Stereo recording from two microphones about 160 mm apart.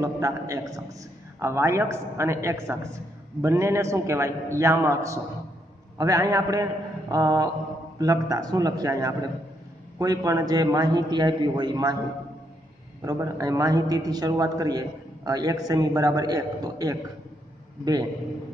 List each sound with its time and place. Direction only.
0.0 s a man's voice: 20° right (ahead or behind)
13.0 s a man's voice: 20° right (ahead or behind)